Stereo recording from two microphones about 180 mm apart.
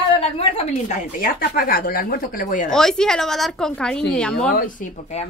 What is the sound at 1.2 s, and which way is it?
Speech, 55° left (ahead or behind).